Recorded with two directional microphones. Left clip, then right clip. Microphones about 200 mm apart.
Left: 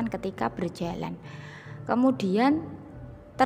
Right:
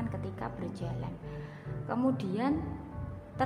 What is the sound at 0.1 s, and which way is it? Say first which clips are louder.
A woman's voice: left 9 dB; 45° left (ahead or behind).